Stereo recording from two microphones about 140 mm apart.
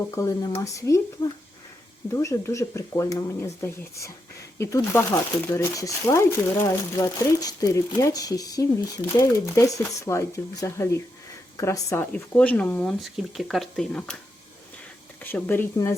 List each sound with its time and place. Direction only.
0.1 s speech: 25° left (ahead or behind)
12.1 s speech: 10° left (ahead or behind)
15.2 s speech: 15° left (ahead or behind)